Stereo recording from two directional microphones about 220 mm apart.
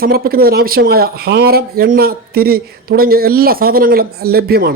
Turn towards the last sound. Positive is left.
turn(degrees=-45)  # may be behind; listen again after turning